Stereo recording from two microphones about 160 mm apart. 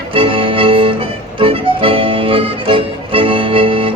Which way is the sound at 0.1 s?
35° right (ahead or behind).